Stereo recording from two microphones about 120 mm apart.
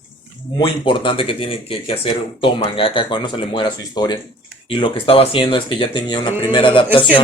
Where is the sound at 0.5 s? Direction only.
45° left (ahead or behind).